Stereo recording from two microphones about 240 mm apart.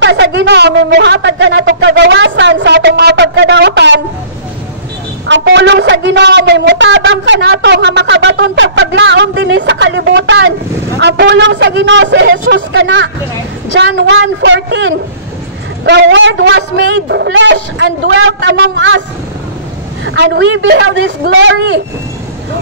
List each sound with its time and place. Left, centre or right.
0.0 s speech: right
5.2 s a man's voice: right
20.1 s a man's voice: right